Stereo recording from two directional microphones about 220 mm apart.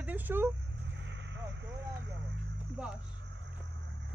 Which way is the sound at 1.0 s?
55° right (ahead or behind).